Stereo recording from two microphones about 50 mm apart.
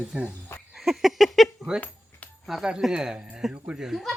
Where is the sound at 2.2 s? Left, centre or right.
Left.